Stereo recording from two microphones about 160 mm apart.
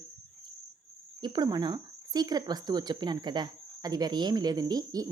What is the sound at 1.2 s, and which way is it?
Speech, 25° right (ahead or behind).